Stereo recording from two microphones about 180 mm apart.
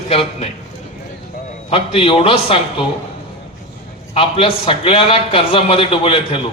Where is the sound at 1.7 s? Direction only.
30° left (ahead or behind).